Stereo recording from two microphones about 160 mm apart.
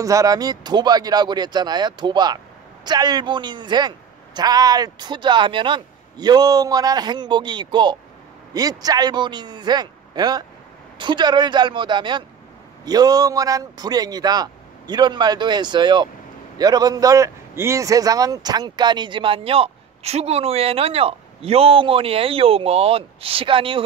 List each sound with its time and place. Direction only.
0.0 s a man's voice: 20° right (ahead or behind)